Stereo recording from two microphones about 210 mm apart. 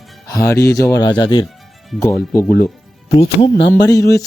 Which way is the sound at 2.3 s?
10° left (ahead or behind).